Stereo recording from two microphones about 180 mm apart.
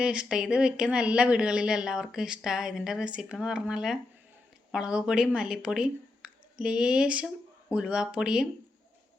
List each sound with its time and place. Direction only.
0.0 s speech: 5° right (ahead or behind)